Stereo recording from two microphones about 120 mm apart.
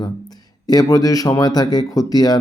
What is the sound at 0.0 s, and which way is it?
Speech, 35° left (ahead or behind).